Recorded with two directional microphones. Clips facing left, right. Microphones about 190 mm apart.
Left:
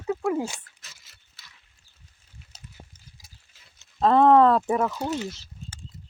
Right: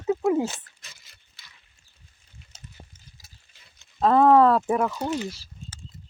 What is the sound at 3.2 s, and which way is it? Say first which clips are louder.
Mechanisms: even; 5° left (ahead or behind).